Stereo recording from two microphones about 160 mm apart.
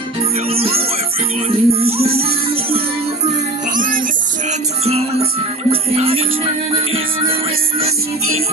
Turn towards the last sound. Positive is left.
turn(degrees=-35)  # may be behind; listen again after turning